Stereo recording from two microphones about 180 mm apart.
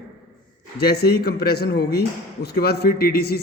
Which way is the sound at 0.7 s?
65° left (ahead or behind).